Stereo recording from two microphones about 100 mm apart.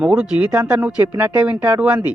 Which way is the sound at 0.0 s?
10° right (ahead or behind).